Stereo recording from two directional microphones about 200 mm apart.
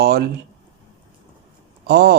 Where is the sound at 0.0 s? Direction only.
50° right (ahead or behind).